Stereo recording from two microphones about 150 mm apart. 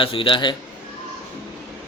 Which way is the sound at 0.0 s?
35° left (ahead or behind).